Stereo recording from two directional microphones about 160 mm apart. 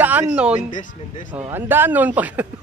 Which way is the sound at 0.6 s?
50° left (ahead or behind).